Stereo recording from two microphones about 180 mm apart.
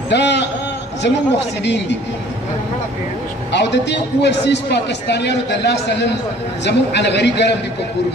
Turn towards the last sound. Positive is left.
turn(degrees=70)  # may be behind; listen again after turning